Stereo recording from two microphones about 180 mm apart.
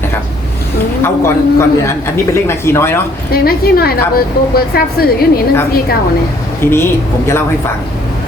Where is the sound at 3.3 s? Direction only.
60° left (ahead or behind).